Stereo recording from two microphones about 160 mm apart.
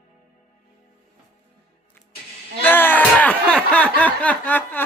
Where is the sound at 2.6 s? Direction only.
10° left (ahead or behind).